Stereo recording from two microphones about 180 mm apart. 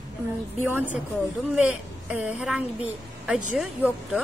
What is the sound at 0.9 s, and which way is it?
A woman's voice, 10° right (ahead or behind).